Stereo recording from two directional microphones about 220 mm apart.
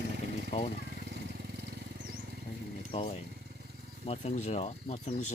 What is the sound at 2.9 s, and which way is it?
Speech, 25° left (ahead or behind).